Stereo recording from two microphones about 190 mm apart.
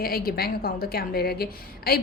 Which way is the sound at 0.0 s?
50° left (ahead or behind).